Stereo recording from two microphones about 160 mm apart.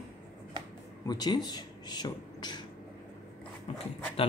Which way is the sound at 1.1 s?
25° left (ahead or behind).